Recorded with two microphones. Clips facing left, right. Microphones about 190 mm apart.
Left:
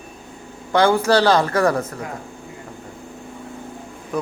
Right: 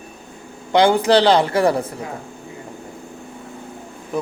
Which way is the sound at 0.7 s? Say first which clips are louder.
Right 2 dB; 15° right (ahead or behind).